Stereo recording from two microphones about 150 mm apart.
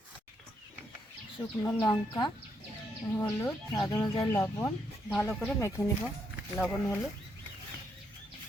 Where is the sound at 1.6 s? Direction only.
20° left (ahead or behind).